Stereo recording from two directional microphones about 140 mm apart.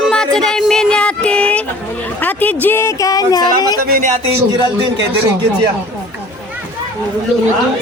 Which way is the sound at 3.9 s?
90° right.